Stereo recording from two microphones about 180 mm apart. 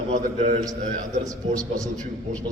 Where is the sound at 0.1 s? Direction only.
40° right (ahead or behind).